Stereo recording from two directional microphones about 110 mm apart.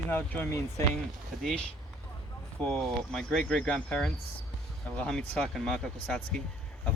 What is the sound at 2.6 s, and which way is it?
Speech, 5° left (ahead or behind).